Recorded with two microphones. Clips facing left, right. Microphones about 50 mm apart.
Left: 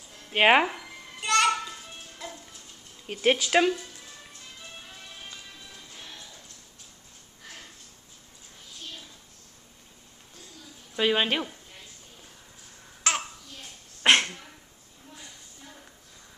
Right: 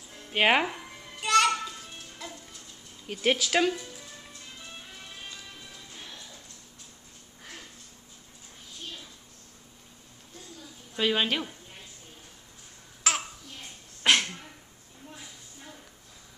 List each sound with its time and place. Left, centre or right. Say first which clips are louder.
0.3 s speech: left 3 dB; centre
1.2 s a sound: right 1 dB; centre
1.8 s music: left 1 dB; centre
3.1 s speech: left 3 dB; centre
11.0 s speech: left 2 dB; centre
13.0 s babbling: left 1 dB; centre
14.0 s cough: left 3 dB; left